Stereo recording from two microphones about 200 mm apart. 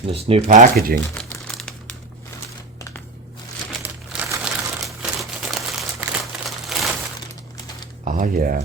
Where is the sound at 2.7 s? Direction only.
15° left (ahead or behind).